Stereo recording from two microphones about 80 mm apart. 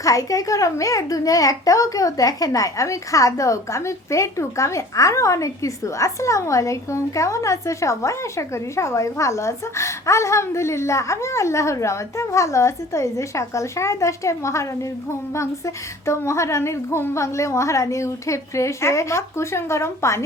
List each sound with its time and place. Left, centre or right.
0.0 s a child's voice: left